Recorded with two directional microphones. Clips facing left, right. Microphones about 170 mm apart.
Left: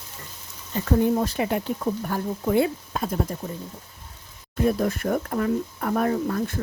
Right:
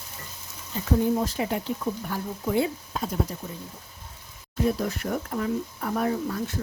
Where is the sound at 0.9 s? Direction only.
60° left (ahead or behind).